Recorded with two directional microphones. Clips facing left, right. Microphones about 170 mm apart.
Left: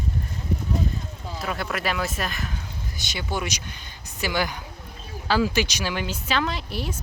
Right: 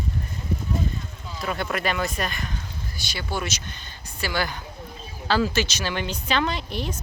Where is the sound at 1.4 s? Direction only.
Centre (ahead or behind).